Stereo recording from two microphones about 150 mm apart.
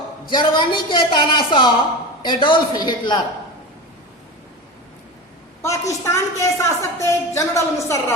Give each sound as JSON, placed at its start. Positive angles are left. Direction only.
{"t": 0.3, "sound": "a man's voice", "side_deg": 30}
{"t": 5.6, "sound": "a woman's voice", "side_deg": 20}